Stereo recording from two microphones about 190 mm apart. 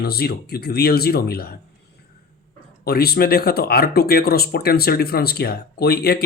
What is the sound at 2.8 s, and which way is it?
Speech, 55° left (ahead or behind).